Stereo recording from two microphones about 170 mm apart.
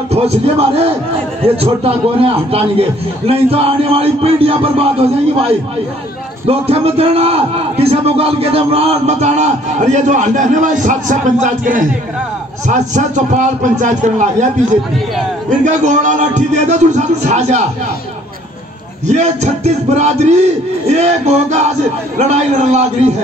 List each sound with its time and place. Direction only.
0.1 s a man's voice: 35° right (ahead or behind)
6.4 s a man's voice: 35° right (ahead or behind)
15.6 s a man's voice: 45° right (ahead or behind)
19.0 s a man's voice: 40° right (ahead or behind)